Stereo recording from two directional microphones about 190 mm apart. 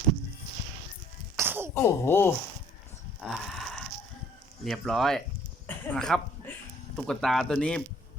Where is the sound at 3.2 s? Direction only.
Centre (ahead or behind).